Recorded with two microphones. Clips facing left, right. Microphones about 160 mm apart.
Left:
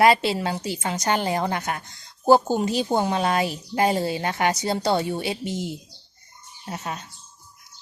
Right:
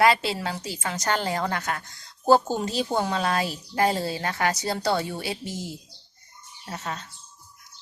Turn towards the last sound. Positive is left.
turn(degrees=15)  # may be behind; listen again after turning